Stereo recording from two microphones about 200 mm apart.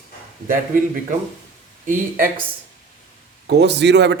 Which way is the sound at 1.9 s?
45° right (ahead or behind).